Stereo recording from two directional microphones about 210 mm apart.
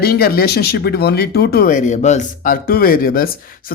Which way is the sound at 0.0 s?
45° left (ahead or behind).